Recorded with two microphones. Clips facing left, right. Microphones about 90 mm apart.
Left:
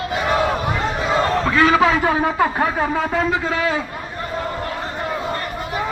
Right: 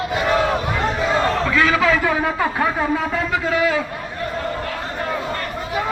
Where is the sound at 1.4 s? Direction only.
30° left (ahead or behind).